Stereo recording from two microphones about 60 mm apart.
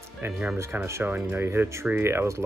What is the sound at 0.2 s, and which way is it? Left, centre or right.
Speech, right.